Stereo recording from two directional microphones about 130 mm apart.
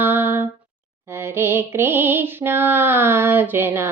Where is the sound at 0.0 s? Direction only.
15° right (ahead or behind).